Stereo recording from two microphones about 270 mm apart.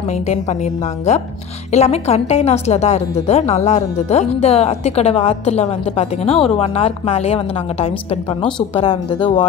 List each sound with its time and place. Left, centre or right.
0.1 s a woman's voice: left
1.7 s a woman's voice: left